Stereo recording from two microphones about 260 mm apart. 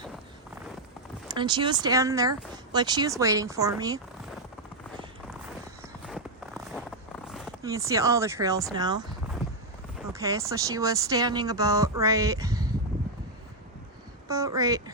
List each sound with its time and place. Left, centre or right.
1.3 s speech: centre
6.1 s a sound: centre
7.6 s speech: centre
14.3 s speech: centre